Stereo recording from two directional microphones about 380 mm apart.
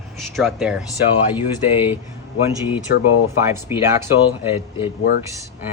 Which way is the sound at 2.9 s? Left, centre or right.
Left.